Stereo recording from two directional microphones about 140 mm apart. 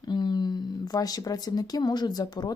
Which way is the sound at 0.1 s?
30° left (ahead or behind).